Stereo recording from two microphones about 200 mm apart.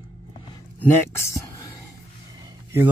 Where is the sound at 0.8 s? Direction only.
10° left (ahead or behind).